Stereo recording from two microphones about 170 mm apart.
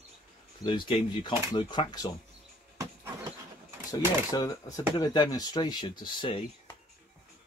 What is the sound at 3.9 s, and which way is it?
Speech, 20° left (ahead or behind).